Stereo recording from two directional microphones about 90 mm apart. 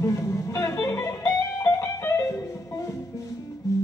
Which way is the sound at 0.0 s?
35° left (ahead or behind).